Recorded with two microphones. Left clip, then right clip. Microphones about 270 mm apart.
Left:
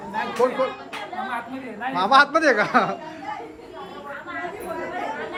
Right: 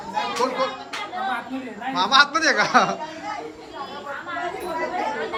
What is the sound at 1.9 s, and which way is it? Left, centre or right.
A man's voice, centre.